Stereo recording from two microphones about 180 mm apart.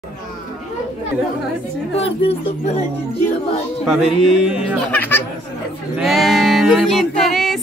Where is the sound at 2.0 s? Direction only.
35° left (ahead or behind).